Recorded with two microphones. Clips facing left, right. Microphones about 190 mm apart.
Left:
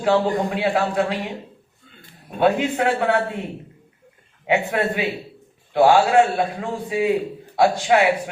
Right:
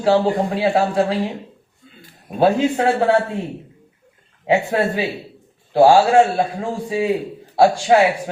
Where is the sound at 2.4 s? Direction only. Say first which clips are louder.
Right 3 dB; 30° right (ahead or behind).